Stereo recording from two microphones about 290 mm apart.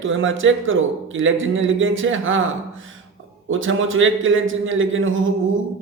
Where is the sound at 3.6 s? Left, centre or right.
Right.